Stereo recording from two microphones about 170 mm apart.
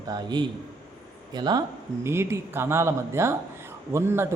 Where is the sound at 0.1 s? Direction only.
25° right (ahead or behind).